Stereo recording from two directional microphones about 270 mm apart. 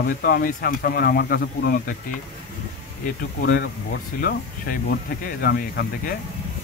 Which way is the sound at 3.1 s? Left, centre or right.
Left.